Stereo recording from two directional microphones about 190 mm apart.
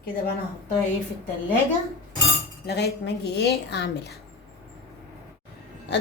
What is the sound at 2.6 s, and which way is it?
A woman's voice, 60° left (ahead or behind).